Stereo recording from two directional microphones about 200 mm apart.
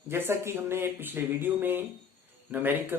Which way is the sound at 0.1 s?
10° right (ahead or behind).